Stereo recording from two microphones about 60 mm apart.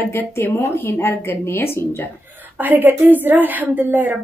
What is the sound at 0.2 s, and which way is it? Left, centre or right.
Speech, left.